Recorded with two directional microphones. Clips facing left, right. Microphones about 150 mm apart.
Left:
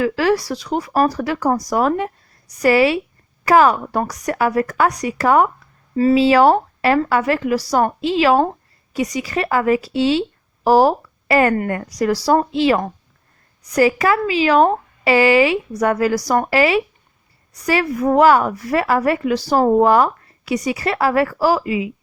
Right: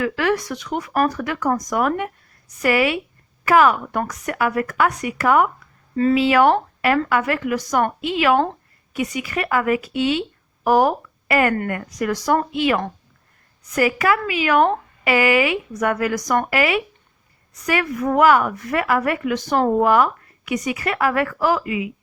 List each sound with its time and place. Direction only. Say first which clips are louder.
0.0 s speech: left 4 dB; 30° left (ahead or behind)
19.5 s speech: left 4 dB; 20° left (ahead or behind)
19.8 s speech: left 3 dB; 35° left (ahead or behind)